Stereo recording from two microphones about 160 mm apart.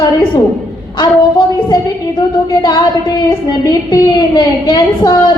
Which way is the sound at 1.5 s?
25° left (ahead or behind).